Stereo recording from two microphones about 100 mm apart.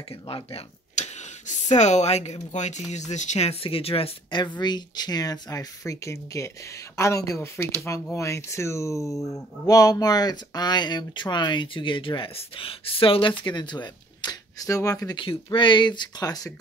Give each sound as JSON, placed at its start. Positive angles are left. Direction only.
{"t": 0.1, "sound": "speech", "side_deg": 75}
{"t": 1.7, "sound": "a woman's voice", "side_deg": 90}
{"t": 3.3, "sound": "speech", "side_deg": 80}
{"t": 9.1, "sound": "speech", "side_deg": 0}
{"t": 9.7, "sound": "speech", "side_deg": 35}
{"t": 15.1, "sound": "speech", "side_deg": 55}